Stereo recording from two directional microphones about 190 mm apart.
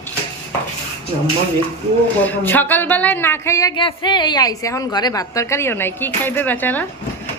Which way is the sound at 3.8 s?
25° left (ahead or behind).